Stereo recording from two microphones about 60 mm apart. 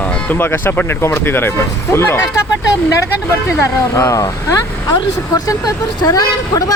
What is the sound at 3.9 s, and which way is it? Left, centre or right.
Speech, left.